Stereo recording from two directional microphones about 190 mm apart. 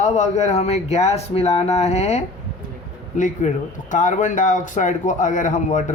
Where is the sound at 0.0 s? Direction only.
35° left (ahead or behind).